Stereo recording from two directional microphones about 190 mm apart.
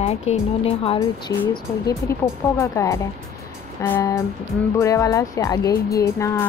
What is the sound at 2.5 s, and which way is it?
Speech, 15° left (ahead or behind).